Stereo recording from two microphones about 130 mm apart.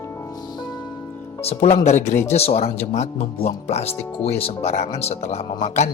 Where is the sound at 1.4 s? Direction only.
55° left (ahead or behind).